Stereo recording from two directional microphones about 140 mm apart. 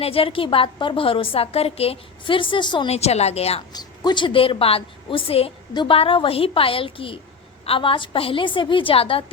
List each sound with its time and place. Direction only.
0.0 s a woman's voice: 45° left (ahead or behind)
3.7 s a woman's voice: 30° left (ahead or behind)